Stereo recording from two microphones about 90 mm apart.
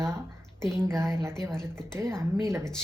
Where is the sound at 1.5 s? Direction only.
5° left (ahead or behind).